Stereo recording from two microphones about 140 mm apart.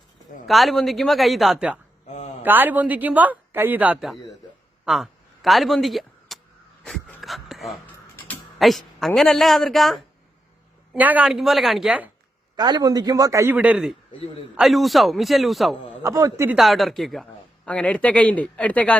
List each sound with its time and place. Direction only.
0.4 s a woman's voice: centre (ahead or behind)
2.0 s a sound: 50° left (ahead or behind)
2.4 s a man's voice: 15° right (ahead or behind)
6.8 s a sound: 5° left (ahead or behind)
8.5 s a woman's voice: centre (ahead or behind)
10.9 s a woman's voice: 10° right (ahead or behind)
12.5 s a man's voice: 30° right (ahead or behind); by 15.8 s centre (ahead or behind)
16.0 s a man's voice: 20° right (ahead or behind)
16.6 s a woman's voice: centre (ahead or behind)